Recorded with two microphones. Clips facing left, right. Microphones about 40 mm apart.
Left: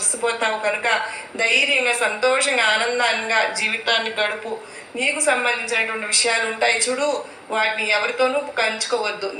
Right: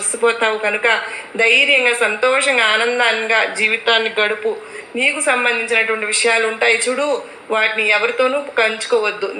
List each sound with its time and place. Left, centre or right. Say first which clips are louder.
0.2 s a woman's voice: right 6 dB; right